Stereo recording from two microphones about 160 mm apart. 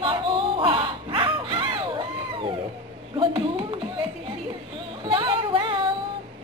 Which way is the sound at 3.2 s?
30° right (ahead or behind).